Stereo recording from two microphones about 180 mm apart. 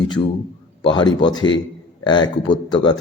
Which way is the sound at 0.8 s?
25° left (ahead or behind).